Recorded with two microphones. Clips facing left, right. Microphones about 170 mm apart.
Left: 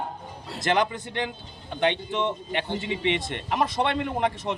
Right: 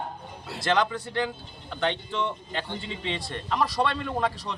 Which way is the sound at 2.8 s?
75° left (ahead or behind).